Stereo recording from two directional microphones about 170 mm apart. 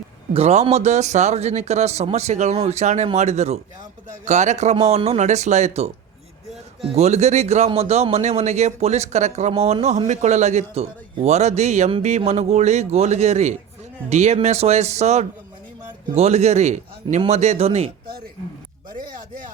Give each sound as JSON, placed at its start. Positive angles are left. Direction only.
{"t": 0.3, "sound": "a man's voice", "side_deg": -40}